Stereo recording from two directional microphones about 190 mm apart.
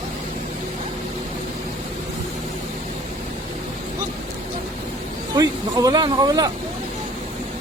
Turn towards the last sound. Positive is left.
turn(degrees=-20)  # may be behind; listen again after turning